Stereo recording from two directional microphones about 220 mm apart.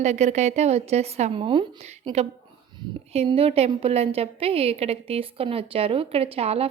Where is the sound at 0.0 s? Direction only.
30° right (ahead or behind).